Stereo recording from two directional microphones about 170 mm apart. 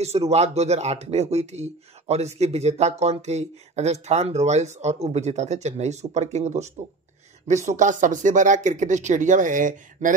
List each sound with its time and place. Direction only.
0.0 s speech: 40° right (ahead or behind)